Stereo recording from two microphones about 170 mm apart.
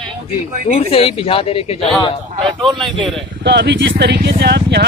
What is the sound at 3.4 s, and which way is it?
Speech, 85° right.